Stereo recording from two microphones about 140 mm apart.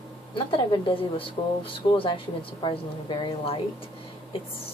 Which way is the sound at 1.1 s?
40° left (ahead or behind).